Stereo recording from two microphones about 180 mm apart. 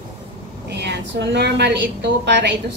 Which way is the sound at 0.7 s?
70° right (ahead or behind).